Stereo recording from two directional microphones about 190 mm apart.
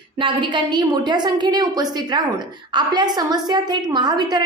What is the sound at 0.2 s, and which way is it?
A woman's voice, 25° right (ahead or behind).